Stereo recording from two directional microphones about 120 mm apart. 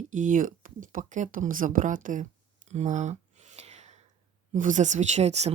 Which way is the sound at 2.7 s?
75° right (ahead or behind).